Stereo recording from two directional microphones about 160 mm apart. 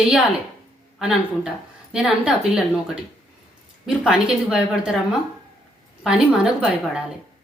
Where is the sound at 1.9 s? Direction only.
5° right (ahead or behind).